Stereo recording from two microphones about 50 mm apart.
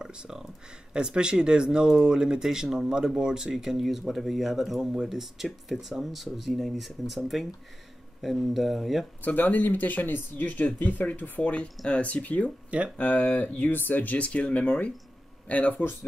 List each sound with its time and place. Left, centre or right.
0.0 s speech: centre
8.2 s speech: centre
9.2 s speech: left